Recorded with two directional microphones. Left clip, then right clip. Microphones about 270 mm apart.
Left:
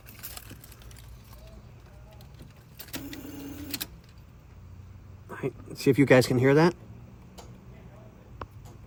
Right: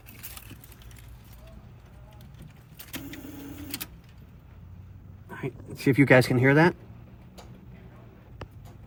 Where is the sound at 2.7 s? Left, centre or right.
Left.